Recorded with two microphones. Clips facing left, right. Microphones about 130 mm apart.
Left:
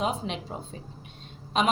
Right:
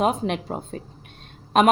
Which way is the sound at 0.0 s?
55° right (ahead or behind).